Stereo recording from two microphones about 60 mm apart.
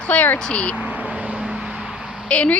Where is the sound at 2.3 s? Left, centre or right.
Left.